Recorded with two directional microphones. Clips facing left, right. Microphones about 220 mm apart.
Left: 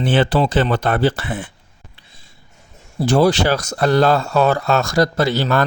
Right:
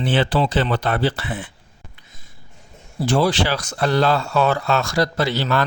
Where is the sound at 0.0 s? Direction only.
50° left (ahead or behind).